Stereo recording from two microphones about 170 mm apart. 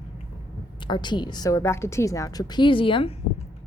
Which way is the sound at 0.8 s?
25° left (ahead or behind).